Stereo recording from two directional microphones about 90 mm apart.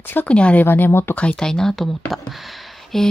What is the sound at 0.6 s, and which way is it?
Speech, 25° left (ahead or behind).